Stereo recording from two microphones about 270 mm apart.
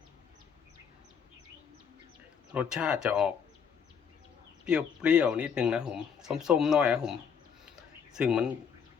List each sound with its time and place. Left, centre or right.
2.5 s speech: centre
4.6 s speech: centre
7.6 s a sound: centre